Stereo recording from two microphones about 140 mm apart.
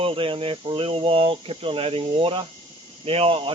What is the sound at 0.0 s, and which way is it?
Speech, 40° right (ahead or behind).